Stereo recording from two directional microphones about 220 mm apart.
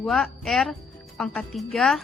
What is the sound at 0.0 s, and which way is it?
A woman's voice, centre (ahead or behind).